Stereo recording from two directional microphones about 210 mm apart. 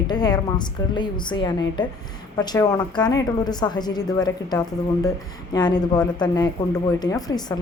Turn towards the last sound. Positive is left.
turn(degrees=20)  # may be behind; listen again after turning